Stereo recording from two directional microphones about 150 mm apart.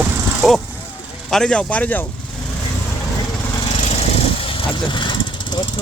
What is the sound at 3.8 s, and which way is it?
Lawn mower, 45° left (ahead or behind).